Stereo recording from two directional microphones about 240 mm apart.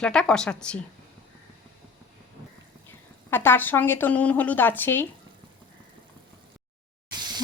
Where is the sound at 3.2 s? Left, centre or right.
Centre.